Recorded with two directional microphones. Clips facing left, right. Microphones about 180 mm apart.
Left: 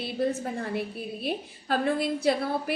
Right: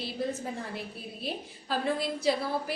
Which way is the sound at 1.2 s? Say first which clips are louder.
Left 4 dB; 55° left (ahead or behind).